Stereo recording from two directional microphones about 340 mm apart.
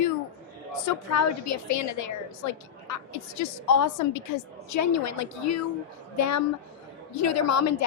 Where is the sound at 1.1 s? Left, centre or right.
Left.